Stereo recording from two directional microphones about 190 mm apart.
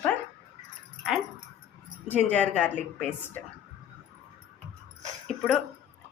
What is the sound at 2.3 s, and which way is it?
Speech, 10° left (ahead or behind).